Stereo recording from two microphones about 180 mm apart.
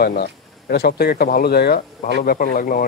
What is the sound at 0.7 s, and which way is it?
Speech, 60° left (ahead or behind).